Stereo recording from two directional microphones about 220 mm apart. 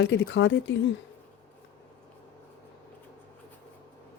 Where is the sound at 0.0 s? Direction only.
55° left (ahead or behind).